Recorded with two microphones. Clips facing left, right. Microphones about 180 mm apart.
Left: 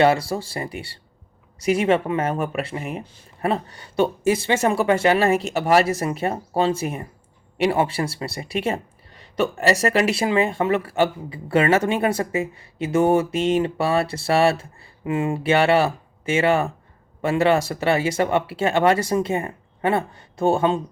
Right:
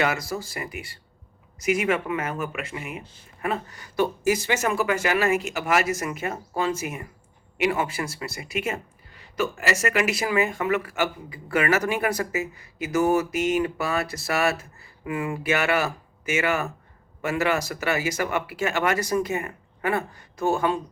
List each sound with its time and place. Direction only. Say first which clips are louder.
0.0 s speech: left 8 dB; 30° left (ahead or behind)